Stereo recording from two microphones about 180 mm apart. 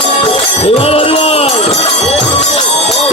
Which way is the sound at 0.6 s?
35° left (ahead or behind).